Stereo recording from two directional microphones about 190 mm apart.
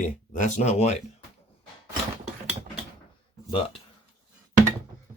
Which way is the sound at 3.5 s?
30° left (ahead or behind).